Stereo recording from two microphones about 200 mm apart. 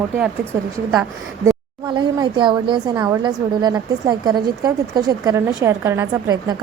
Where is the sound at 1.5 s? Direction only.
20° right (ahead or behind).